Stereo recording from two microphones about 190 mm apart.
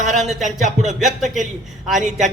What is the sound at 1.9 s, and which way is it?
Speech, 40° right (ahead or behind).